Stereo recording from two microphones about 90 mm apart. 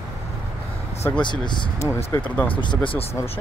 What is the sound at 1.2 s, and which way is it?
Speech, 60° left (ahead or behind).